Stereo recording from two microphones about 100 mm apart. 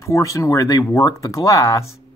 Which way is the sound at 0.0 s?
30° left (ahead or behind).